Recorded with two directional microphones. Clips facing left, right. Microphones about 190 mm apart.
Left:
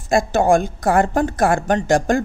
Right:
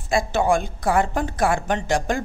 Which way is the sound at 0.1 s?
45° left (ahead or behind).